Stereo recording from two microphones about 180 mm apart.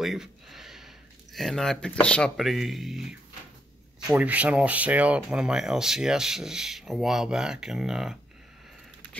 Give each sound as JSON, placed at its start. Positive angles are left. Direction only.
{"t": 0.0, "sound": "speech", "side_deg": 0}